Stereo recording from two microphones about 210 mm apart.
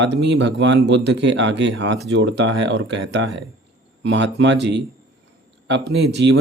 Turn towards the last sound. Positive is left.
turn(degrees=-55)  # may be behind; listen again after turning